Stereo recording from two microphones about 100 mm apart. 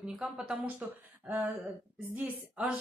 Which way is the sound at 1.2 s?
20° right (ahead or behind).